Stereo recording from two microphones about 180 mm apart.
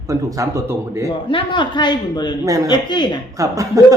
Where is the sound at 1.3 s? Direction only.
25° left (ahead or behind).